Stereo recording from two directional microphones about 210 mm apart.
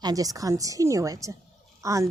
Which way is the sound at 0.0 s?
15° right (ahead or behind).